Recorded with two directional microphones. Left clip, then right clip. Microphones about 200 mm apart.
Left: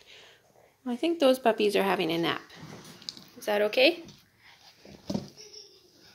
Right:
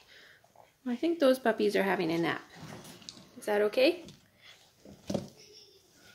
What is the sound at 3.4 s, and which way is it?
Speech, 10° right (ahead or behind).